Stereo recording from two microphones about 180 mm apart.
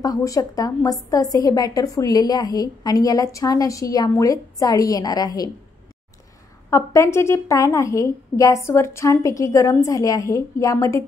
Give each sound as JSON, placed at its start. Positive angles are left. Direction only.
{"t": 0.0, "sound": "a woman's voice", "side_deg": 20}
{"t": 6.7, "sound": "a woman's voice", "side_deg": 15}